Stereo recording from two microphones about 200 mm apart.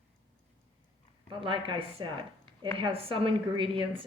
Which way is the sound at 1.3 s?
25° right (ahead or behind).